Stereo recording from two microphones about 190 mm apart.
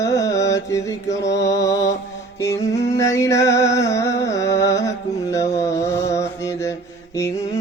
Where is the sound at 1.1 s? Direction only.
65° left (ahead or behind).